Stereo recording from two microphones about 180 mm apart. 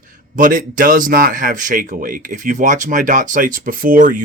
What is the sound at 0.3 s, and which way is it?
Speech, 50° right (ahead or behind).